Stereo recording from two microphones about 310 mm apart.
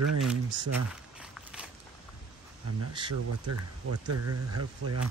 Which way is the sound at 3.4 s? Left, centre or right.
Right.